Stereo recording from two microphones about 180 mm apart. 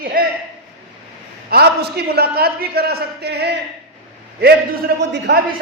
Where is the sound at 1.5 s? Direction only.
60° right (ahead or behind).